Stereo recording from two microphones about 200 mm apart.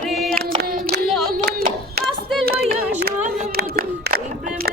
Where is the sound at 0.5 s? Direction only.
50° right (ahead or behind).